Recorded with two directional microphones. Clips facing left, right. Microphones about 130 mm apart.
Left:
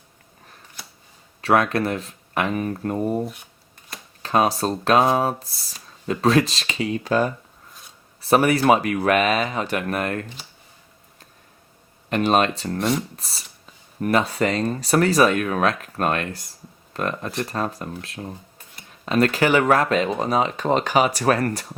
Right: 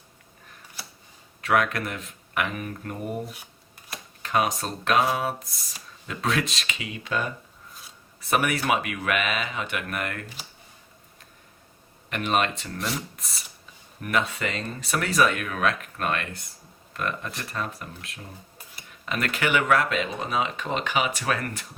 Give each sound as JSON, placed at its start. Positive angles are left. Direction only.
{"t": 1.4, "sound": "speech", "side_deg": 35}
{"t": 12.0, "sound": "speech", "side_deg": 35}